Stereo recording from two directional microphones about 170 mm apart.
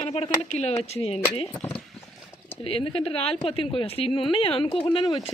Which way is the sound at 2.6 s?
35° left (ahead or behind).